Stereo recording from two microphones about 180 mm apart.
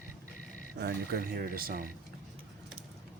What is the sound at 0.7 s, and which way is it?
Speech, 60° right (ahead or behind).